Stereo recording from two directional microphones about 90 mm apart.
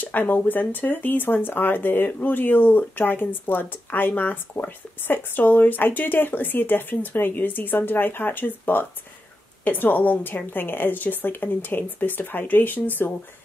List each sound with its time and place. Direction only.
0.0 s speech: 20° left (ahead or behind)